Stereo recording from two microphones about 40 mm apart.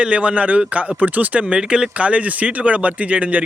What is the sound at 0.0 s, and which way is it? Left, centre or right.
Speech, right.